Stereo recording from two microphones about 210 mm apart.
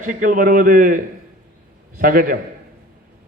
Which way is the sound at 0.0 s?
40° right (ahead or behind).